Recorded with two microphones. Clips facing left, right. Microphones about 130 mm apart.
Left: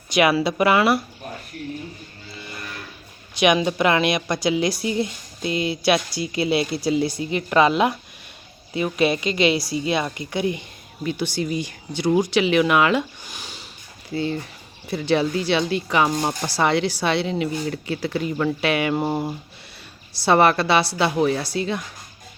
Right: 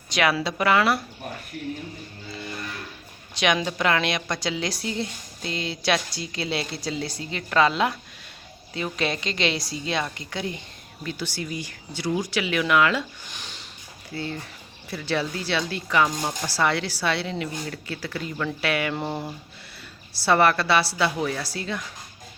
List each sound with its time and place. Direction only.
0.1 s a woman's voice: 10° left (ahead or behind)
3.3 s a woman's voice: 15° left (ahead or behind)
13.3 s a sound: 10° left (ahead or behind)
14.8 s a woman's voice: 20° left (ahead or behind)